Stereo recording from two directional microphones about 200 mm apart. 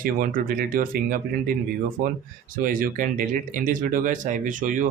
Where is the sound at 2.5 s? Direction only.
45° right (ahead or behind).